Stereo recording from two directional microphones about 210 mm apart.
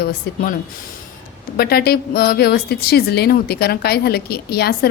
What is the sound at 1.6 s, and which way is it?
A woman's voice, 45° left (ahead or behind).